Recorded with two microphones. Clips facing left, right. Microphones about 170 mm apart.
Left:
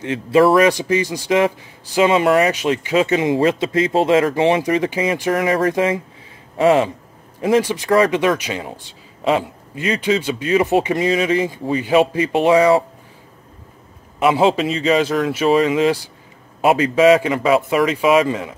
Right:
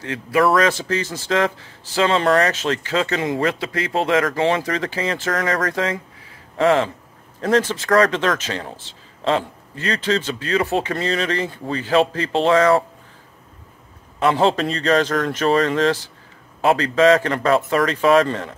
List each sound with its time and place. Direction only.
0.0 s speech: 25° left (ahead or behind)
0.6 s speech: 15° left (ahead or behind)
14.2 s a man's voice: 5° left (ahead or behind)